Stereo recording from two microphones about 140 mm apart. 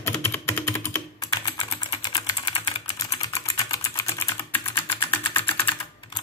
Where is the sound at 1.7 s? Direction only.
35° left (ahead or behind).